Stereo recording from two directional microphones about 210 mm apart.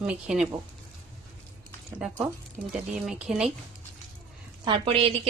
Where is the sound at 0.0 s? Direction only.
5° right (ahead or behind).